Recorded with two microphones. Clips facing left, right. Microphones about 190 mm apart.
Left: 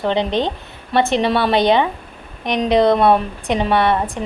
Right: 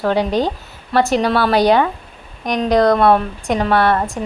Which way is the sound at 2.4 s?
25° left (ahead or behind).